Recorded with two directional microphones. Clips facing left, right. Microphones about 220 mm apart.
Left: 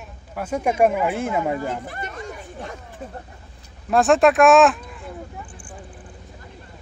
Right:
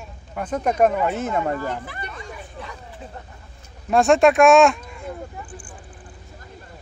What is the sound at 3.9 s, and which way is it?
Speech, centre (ahead or behind).